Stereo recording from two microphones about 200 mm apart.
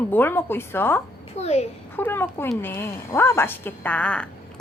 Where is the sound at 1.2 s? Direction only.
30° left (ahead or behind).